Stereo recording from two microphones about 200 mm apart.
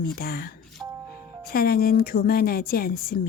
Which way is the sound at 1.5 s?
50° left (ahead or behind).